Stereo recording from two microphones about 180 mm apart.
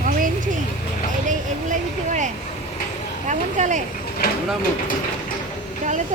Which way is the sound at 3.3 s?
40° right (ahead or behind).